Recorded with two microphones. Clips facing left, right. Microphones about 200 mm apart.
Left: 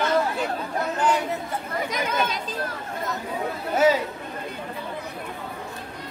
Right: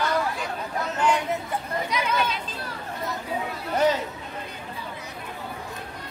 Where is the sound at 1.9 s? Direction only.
45° left (ahead or behind).